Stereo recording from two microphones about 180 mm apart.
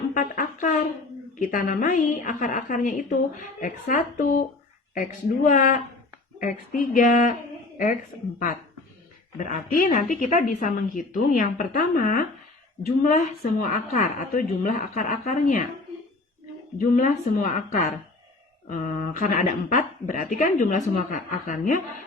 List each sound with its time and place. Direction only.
0.1 s music: 45° left (ahead or behind)
1.4 s speech: 50° left (ahead or behind)
9.5 s speech: 45° left (ahead or behind)
16.7 s speech: 50° left (ahead or behind)